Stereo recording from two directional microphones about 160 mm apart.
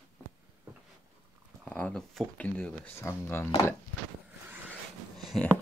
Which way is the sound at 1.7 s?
10° left (ahead or behind).